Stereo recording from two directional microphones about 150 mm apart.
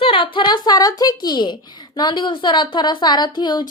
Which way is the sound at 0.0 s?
35° left (ahead or behind).